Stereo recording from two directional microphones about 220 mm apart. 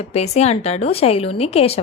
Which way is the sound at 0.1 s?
30° left (ahead or behind).